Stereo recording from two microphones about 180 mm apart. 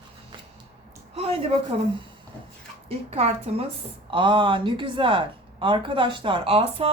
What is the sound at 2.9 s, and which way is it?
A woman's voice, 35° right (ahead or behind).